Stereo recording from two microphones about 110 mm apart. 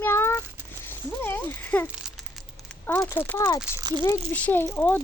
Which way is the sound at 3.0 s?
20° left (ahead or behind).